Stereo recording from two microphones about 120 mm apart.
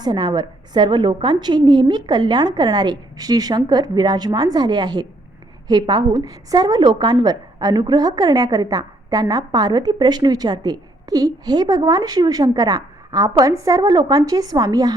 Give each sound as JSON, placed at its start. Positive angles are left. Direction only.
{"t": 0.0, "sound": "a woman's voice", "side_deg": -40}